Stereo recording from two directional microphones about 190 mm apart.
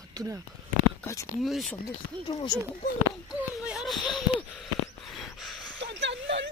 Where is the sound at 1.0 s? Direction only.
15° left (ahead or behind).